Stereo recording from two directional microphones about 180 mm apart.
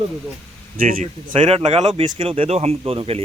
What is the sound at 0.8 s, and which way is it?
Speech, 50° right (ahead or behind).